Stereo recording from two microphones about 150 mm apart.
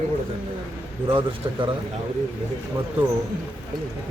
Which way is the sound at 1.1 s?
35° right (ahead or behind).